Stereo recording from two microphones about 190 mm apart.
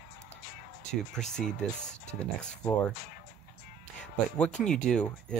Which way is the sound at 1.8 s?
40° left (ahead or behind).